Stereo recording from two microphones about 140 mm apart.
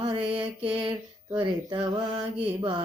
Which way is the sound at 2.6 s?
35° right (ahead or behind).